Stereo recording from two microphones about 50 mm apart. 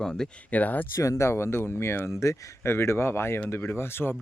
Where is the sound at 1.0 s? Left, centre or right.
Left.